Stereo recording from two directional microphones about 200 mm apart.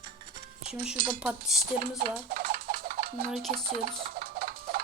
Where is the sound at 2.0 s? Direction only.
50° right (ahead or behind).